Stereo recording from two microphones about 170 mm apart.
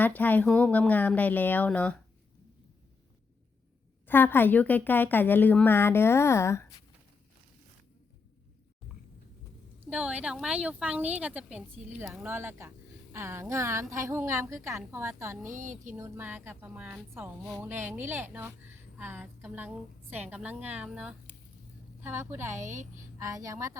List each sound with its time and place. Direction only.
0.0 s a woman's voice: 10° left (ahead or behind)
4.0 s a woman's voice: 10° left (ahead or behind)
9.9 s a woman's voice: 5° right (ahead or behind)
15.5 s a sound: 50° right (ahead or behind)
16.0 s a woman's voice: 15° right (ahead or behind)
22.6 s a sound: 45° right (ahead or behind)
23.1 s a woman's voice: 20° right (ahead or behind)